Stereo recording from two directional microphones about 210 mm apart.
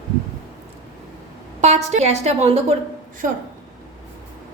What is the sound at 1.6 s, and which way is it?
A woman's voice, 30° right (ahead or behind).